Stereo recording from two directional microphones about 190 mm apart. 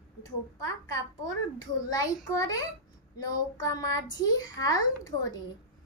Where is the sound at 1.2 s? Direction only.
20° left (ahead or behind).